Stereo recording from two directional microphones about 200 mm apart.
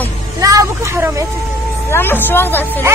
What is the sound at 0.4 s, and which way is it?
Vehicle, 15° right (ahead or behind).